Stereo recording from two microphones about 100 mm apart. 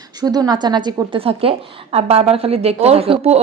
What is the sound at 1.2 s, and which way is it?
A woman's voice, 70° right (ahead or behind).